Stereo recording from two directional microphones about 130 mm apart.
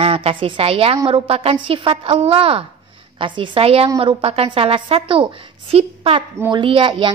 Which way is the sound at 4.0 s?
45° right (ahead or behind).